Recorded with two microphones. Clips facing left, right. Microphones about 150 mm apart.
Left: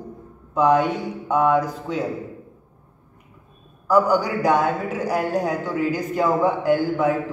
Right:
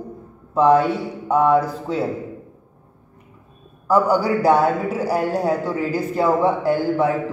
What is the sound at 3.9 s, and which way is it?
A man's voice, 30° right (ahead or behind).